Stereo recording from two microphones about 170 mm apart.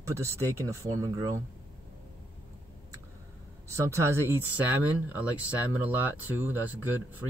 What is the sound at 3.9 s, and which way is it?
Speech, 15° right (ahead or behind).